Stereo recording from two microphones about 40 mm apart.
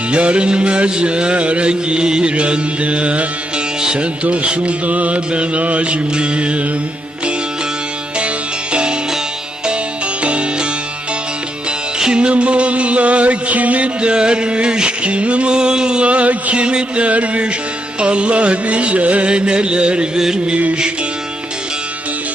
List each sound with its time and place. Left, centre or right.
0.1 s music: right
3.8 s music: centre
4.0 s music: right
8.7 s music: right
10.2 s music: right
11.9 s music: right
16.0 s music: right
20.1 s a sound: centre